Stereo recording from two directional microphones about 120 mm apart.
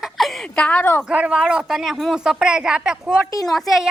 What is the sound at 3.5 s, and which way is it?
Baby laughter, centre (ahead or behind).